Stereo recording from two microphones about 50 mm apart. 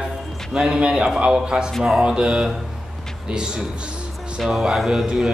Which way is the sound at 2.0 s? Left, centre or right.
Centre.